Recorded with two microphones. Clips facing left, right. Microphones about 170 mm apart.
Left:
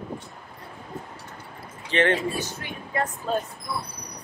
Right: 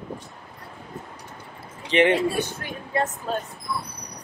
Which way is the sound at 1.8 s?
15° right (ahead or behind).